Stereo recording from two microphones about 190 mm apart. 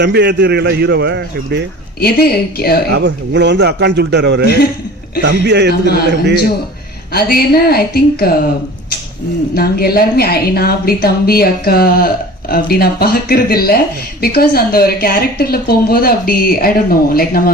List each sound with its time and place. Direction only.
0.0 s a man's voice: 60° right (ahead or behind)
2.0 s a woman's voice: 55° left (ahead or behind)
2.9 s a man's voice: 65° right (ahead or behind)
5.8 s a woman's voice: 55° left (ahead or behind)
7.1 s speech: 55° left (ahead or behind)
9.6 s speech: 55° left (ahead or behind)